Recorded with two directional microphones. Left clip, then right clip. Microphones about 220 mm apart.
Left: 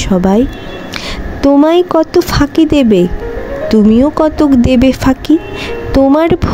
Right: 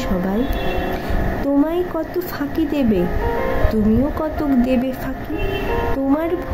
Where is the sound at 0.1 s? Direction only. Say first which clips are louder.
Left 14 dB; 35° left (ahead or behind).